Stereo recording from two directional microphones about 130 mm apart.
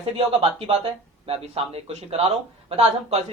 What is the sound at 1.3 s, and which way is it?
Speech, 50° right (ahead or behind).